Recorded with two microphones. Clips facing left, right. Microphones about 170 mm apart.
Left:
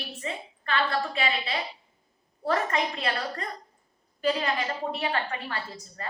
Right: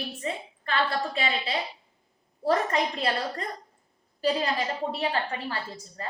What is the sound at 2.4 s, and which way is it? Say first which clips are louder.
A woman's voice: right 2 dB; 35° right (ahead or behind).